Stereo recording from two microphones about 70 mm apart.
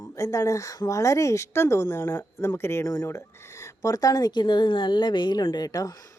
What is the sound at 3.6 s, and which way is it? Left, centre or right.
A woman's voice, left.